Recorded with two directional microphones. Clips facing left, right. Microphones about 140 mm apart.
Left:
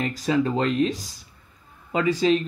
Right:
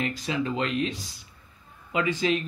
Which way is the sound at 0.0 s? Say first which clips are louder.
Left 6 dB; 40° left (ahead or behind).